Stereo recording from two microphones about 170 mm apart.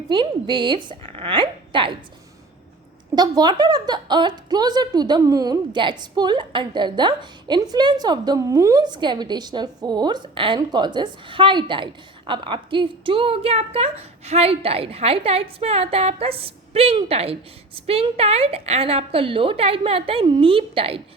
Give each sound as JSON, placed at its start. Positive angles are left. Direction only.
{"t": 0.1, "sound": "a woman's voice", "side_deg": -30}
{"t": 3.2, "sound": "a woman's voice", "side_deg": -25}